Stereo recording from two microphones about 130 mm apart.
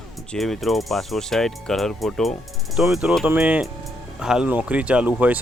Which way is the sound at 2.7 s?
5° right (ahead or behind).